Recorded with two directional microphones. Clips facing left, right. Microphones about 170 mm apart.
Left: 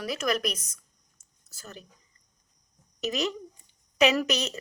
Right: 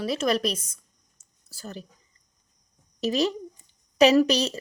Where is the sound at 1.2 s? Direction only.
35° right (ahead or behind).